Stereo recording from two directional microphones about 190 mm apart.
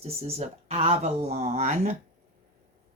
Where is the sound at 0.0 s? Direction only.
30° right (ahead or behind).